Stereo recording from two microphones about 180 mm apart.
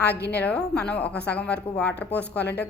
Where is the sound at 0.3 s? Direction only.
10° left (ahead or behind).